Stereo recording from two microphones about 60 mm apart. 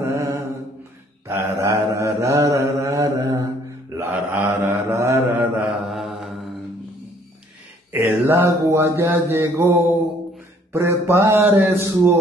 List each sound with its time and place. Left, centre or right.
0.1 s mantra: right
4.0 s mantra: right
4.6 s mantra: right
5.3 s mantra: right
5.9 s mantra: centre
7.9 s a sound: right
8.5 s a man's voice: right